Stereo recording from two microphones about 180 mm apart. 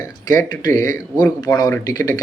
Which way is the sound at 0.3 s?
20° left (ahead or behind).